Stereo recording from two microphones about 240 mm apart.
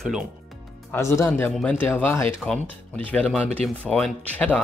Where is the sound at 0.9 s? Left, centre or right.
Centre.